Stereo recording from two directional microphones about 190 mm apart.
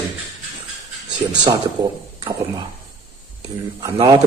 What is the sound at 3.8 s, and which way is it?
Speech, 20° right (ahead or behind).